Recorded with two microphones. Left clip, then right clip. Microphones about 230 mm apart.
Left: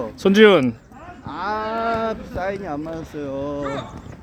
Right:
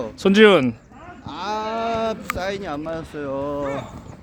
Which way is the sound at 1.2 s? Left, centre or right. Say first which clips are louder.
Left 1 dB; centre.